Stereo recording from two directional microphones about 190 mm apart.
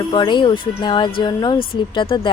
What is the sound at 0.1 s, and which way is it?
Speech, 25° left (ahead or behind).